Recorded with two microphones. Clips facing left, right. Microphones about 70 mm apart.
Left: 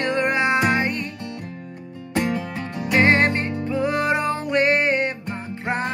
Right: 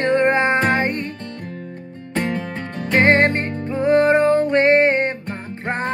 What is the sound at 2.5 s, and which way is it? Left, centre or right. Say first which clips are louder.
Music: right 1 dB; centre.